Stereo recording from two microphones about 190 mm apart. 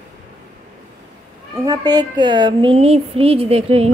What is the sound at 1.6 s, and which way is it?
Speech, 20° right (ahead or behind).